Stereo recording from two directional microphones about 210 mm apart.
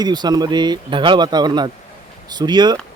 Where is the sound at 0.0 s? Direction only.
20° right (ahead or behind).